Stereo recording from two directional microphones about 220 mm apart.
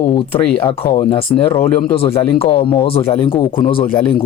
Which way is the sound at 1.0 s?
25° left (ahead or behind).